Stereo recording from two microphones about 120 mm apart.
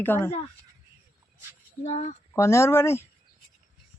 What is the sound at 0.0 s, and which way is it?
Speech, 15° left (ahead or behind).